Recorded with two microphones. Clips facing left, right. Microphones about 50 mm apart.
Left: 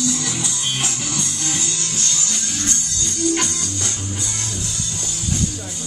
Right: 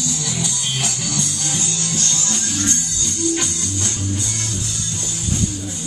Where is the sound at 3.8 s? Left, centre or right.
Centre.